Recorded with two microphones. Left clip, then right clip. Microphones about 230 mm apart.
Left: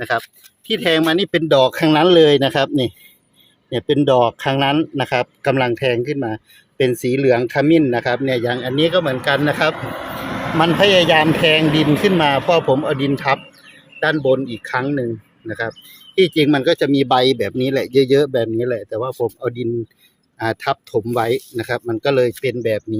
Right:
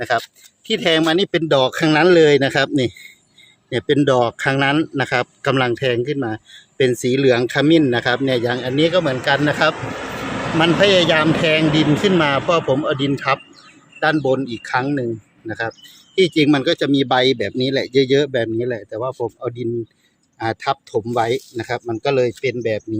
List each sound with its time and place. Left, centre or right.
0.0 s speech: centre
9.7 s vehicle: right
10.8 s speech: centre